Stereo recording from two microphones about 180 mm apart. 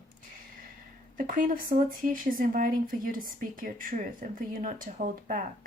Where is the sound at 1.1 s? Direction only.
50° right (ahead or behind).